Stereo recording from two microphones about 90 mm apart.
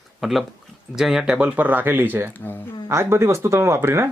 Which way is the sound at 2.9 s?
30° right (ahead or behind).